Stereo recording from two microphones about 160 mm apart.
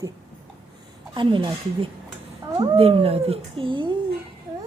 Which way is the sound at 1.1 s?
30° right (ahead or behind).